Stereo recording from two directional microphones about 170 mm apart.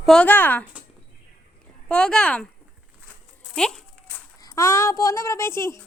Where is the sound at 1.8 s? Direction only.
5° left (ahead or behind).